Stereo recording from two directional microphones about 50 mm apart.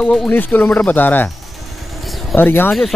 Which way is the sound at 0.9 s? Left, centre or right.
Left.